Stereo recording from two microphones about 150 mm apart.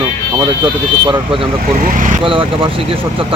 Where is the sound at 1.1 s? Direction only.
35° right (ahead or behind).